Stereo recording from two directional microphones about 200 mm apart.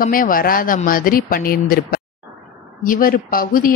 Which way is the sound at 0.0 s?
45° left (ahead or behind).